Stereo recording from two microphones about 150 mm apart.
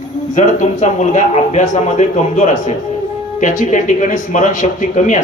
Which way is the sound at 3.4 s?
60° left (ahead or behind).